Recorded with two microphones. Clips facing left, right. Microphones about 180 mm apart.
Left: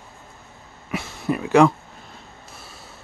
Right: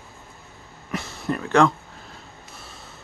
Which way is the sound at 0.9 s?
5° left (ahead or behind).